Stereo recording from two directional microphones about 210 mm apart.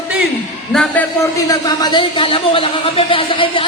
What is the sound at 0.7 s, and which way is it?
A man's voice, 5° left (ahead or behind).